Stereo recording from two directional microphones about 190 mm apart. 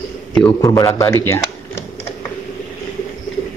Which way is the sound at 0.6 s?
15° left (ahead or behind).